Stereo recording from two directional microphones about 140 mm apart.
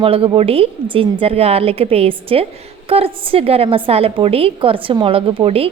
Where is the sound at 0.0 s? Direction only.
40° right (ahead or behind).